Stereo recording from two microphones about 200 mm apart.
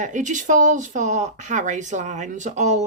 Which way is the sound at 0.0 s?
40° right (ahead or behind).